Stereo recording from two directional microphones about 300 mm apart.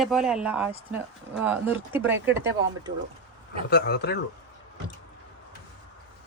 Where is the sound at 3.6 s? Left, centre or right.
Left.